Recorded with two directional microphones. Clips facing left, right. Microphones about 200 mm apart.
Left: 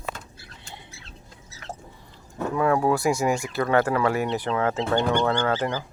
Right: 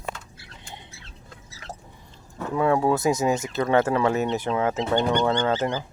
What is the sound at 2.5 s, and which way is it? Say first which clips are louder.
Speech: right 1 dB; 20° right (ahead or behind).